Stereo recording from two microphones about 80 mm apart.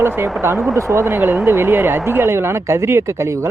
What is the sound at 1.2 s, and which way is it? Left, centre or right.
Speech, right.